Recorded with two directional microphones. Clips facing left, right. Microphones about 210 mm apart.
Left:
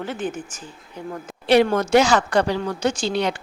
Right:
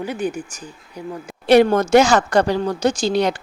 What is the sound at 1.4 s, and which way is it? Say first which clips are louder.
A woman's voice: right 4 dB; 45° right (ahead or behind).